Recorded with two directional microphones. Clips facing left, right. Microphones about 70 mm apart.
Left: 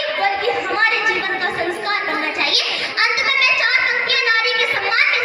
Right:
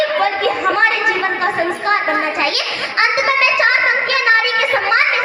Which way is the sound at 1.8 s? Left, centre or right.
Right.